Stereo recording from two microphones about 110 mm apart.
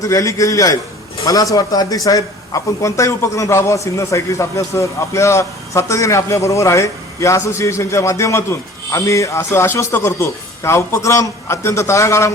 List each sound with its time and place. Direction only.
0.0 s a man's voice: 30° left (ahead or behind)